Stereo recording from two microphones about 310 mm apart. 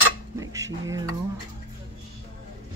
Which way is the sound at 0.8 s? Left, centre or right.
Centre.